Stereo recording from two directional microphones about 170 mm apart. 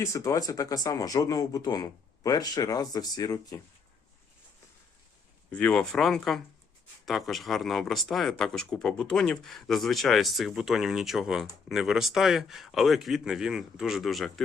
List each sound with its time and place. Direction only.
0.0 s speech: 20° left (ahead or behind)
5.5 s speech: 5° left (ahead or behind)